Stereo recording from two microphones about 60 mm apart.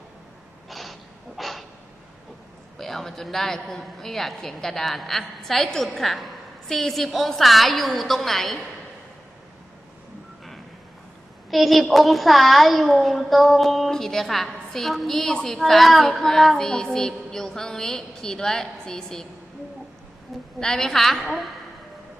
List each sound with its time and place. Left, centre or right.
0.7 s snort: centre
1.4 s a sound: centre
2.7 s a woman's voice: centre
11.5 s a woman's voice: centre
20.6 s a woman's voice: centre